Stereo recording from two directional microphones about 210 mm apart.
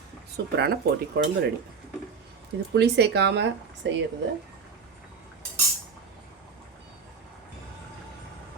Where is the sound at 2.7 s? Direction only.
55° right (ahead or behind).